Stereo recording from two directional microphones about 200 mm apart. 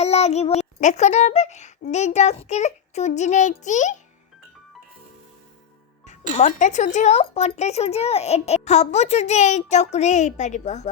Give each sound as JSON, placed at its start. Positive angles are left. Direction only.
{"t": 0.0, "sound": "a child's voice", "side_deg": 35}
{"t": 6.1, "sound": "speech", "side_deg": 35}